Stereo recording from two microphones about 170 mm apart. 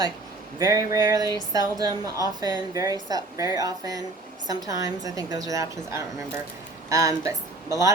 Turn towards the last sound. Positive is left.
turn(degrees=-20)  # may be behind; listen again after turning